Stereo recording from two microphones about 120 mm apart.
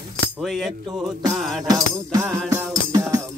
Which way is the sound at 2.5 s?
30° right (ahead or behind).